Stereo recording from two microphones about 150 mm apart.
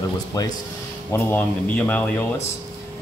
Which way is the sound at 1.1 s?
10° left (ahead or behind).